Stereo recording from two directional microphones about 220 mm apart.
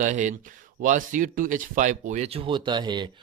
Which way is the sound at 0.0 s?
35° right (ahead or behind).